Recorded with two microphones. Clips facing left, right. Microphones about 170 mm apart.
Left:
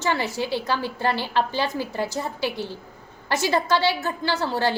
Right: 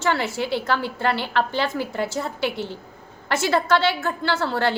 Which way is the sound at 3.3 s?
15° left (ahead or behind).